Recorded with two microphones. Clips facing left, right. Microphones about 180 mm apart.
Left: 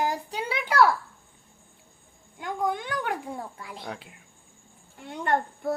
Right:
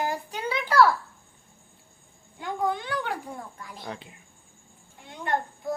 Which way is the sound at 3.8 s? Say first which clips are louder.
Right 1 dB; 5° left (ahead or behind).